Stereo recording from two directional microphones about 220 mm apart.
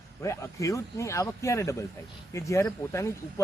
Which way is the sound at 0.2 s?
15° left (ahead or behind).